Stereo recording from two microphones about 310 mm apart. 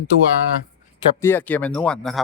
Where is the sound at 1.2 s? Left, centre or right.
Centre.